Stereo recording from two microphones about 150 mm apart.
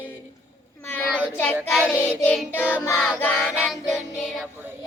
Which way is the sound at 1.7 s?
5° right (ahead or behind).